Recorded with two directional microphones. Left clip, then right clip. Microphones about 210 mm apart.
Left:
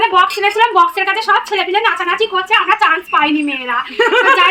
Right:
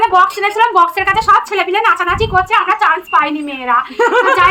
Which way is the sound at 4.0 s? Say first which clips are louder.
Left 2 dB; 20° right (ahead or behind).